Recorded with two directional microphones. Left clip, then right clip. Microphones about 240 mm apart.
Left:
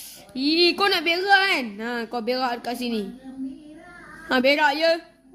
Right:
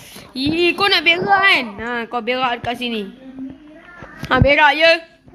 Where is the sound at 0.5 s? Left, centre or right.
Centre.